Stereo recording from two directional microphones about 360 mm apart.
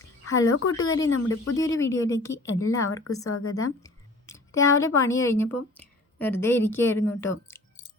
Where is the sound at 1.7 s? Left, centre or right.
Centre.